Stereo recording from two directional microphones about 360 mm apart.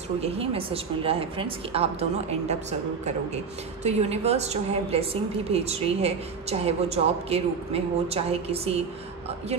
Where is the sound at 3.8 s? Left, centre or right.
Centre.